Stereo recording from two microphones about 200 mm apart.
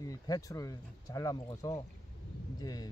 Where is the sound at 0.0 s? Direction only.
15° left (ahead or behind).